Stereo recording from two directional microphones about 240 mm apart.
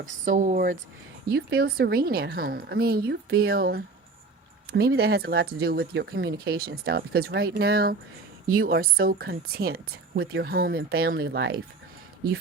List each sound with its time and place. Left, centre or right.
0.0 s speech: right